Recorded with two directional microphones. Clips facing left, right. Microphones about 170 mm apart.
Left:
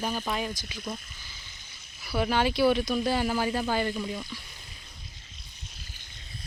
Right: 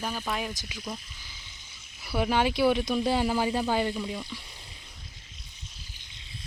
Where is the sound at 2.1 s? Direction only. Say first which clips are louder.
Even; 15° right (ahead or behind).